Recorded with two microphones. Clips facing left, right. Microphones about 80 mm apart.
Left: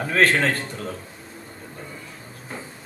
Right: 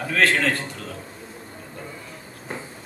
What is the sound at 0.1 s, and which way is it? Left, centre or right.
Speech, left.